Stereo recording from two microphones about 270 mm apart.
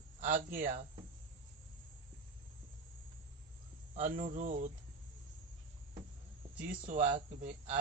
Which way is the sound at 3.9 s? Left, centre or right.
Right.